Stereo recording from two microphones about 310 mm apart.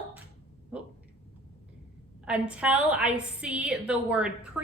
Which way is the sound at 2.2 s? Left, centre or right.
Centre.